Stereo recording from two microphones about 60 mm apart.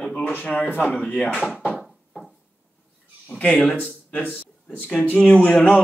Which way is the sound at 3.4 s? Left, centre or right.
Centre.